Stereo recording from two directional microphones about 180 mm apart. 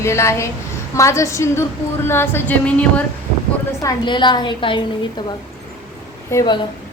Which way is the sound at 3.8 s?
25° left (ahead or behind).